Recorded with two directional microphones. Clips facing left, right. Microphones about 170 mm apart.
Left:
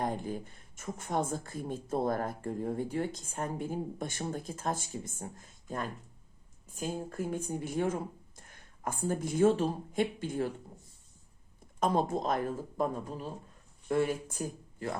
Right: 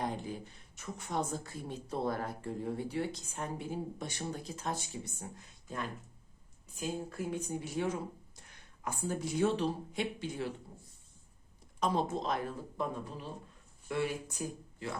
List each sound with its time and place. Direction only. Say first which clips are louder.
0.0 s speech: left 3 dB; 50° left (ahead or behind)
11.8 s speech: left 3 dB; 50° left (ahead or behind)